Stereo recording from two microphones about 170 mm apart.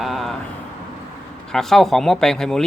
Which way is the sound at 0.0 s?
Centre (ahead or behind).